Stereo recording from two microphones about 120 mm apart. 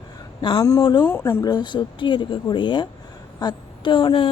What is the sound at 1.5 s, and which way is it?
A woman's voice, 35° left (ahead or behind).